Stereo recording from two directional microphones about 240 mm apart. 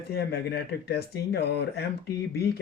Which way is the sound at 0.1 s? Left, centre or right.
Left.